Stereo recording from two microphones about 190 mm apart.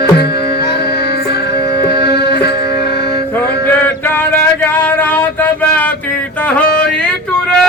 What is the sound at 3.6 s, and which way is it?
Male singing, 10° left (ahead or behind).